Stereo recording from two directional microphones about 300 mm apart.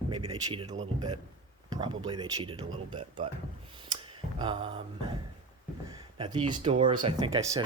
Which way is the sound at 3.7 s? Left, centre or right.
Centre.